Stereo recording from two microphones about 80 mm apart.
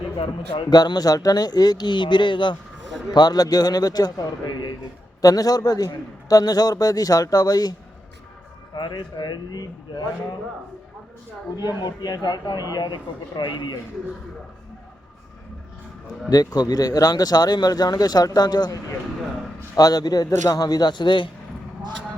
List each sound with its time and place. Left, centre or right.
0.5 s speech: left
3.1 s a man's voice: left
8.7 s speech: left
11.5 s speech: left
16.3 s a man's voice: left